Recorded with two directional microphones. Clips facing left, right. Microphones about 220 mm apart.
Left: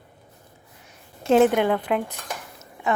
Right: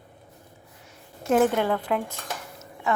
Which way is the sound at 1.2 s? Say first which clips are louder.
Left 4 dB; 25° left (ahead or behind).